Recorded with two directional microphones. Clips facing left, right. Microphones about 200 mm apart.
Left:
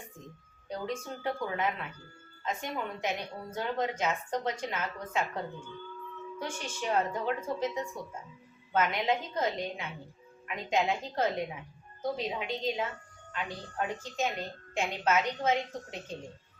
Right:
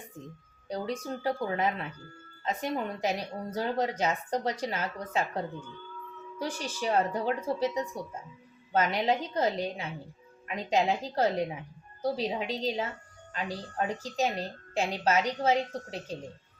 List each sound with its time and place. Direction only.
0.7 s a woman's voice: 35° right (ahead or behind)
6.4 s a woman's voice: 35° right (ahead or behind)